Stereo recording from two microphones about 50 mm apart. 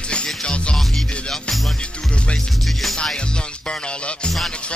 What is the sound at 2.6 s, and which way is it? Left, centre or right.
Music, centre.